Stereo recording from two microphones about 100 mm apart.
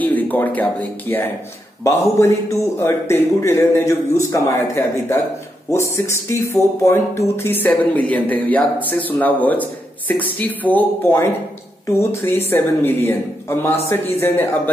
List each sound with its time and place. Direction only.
0.0 s a man's voice: 15° left (ahead or behind)